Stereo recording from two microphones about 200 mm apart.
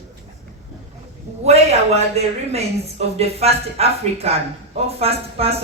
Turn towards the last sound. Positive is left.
turn(degrees=-30)  # may be behind; listen again after turning